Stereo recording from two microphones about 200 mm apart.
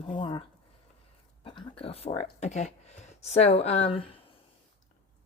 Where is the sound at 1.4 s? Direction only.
25° left (ahead or behind).